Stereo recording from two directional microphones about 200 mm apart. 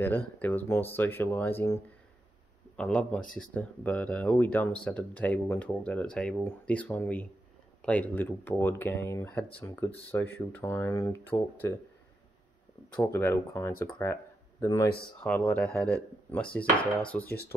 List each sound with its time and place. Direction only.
0.0 s a man's voice: 10° left (ahead or behind)
12.9 s a man's voice: 10° left (ahead or behind)